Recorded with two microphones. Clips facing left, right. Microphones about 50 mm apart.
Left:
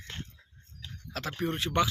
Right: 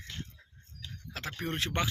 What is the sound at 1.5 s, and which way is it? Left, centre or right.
Speech, right.